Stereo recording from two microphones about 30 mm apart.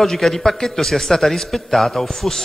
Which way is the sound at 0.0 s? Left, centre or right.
Centre.